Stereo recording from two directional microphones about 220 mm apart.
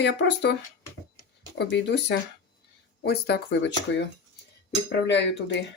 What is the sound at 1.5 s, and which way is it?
Speech, 50° left (ahead or behind).